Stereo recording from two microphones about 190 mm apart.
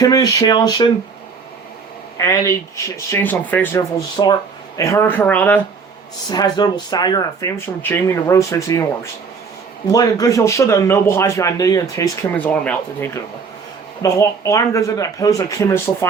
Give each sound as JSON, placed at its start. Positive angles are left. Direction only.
{"t": 0.0, "sound": "speech", "side_deg": 20}
{"t": 2.1, "sound": "speech", "side_deg": 15}
{"t": 4.2, "sound": "speech", "side_deg": 25}
{"t": 6.3, "sound": "speech", "side_deg": 20}
{"t": 9.8, "sound": "speech", "side_deg": 20}